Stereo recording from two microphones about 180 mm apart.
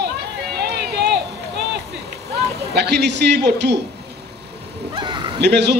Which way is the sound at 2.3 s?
70° right (ahead or behind).